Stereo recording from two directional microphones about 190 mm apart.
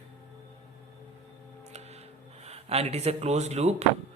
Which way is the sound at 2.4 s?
35° right (ahead or behind).